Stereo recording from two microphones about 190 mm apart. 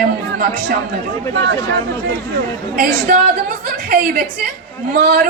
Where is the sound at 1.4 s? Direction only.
70° right (ahead or behind).